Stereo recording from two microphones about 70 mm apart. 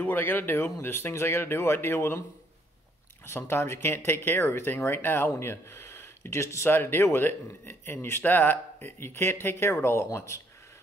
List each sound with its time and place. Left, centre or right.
0.0 s speech: left
3.3 s speech: left